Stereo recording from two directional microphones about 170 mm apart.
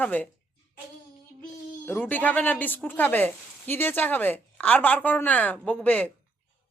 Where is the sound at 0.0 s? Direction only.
10° left (ahead or behind).